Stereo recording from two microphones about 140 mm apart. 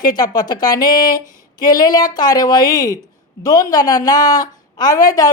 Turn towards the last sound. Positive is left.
turn(degrees=25)  # may be behind; listen again after turning